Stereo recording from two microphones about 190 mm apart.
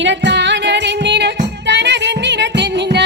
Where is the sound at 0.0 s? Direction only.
70° right (ahead or behind).